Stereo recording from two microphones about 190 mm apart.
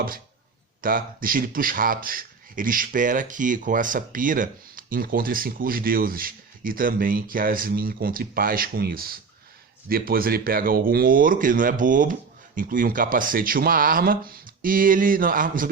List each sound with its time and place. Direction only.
0.8 s a man's voice: 45° right (ahead or behind)